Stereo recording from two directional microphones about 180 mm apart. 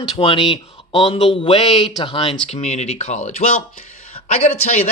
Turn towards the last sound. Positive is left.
turn(degrees=40)  # may be behind; listen again after turning